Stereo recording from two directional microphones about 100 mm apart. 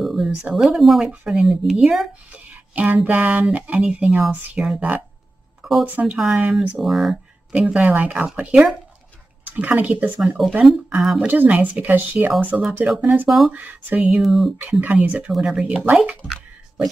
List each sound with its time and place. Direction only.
0.0 s speech: 5° right (ahead or behind)
1.0 s speech: 15° right (ahead or behind)
1.4 s speech: 5° right (ahead or behind)
2.3 s speech: 15° right (ahead or behind)
5.6 s a sound: centre (ahead or behind)
6.8 s speech: centre (ahead or behind)
7.6 s speech: 15° right (ahead or behind)
10.2 s speech: centre (ahead or behind)
11.2 s speech: 15° right (ahead or behind)
13.0 s speech: 20° right (ahead or behind)
14.2 s speech: centre (ahead or behind)
14.7 s speech: 15° right (ahead or behind)
16.3 s a sound: 5° right (ahead or behind)